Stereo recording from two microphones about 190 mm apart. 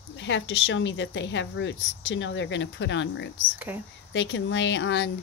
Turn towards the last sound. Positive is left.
turn(degrees=70)  # may be behind; listen again after turning